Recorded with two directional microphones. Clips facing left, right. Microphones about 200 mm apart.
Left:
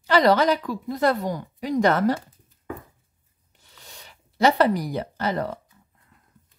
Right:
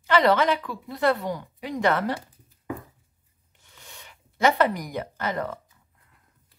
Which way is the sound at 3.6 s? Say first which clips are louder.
Left 1 dB; 35° left (ahead or behind).